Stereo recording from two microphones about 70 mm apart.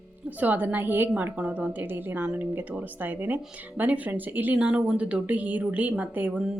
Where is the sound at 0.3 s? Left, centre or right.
Right.